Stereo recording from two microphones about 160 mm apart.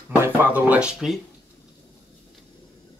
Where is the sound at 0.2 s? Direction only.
10° right (ahead or behind).